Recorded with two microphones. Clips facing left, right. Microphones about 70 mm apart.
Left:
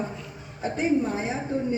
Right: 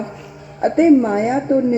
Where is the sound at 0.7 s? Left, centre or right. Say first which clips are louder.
Right 12 dB; right.